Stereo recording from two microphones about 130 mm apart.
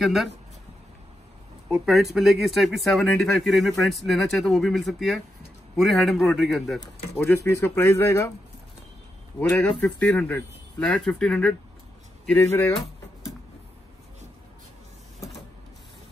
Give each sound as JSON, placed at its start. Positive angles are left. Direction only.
{"t": 0.0, "sound": "speech", "side_deg": 0}
{"t": 1.7, "sound": "speech", "side_deg": 0}
{"t": 7.4, "sound": "speech", "side_deg": 20}
{"t": 9.4, "sound": "speech", "side_deg": 10}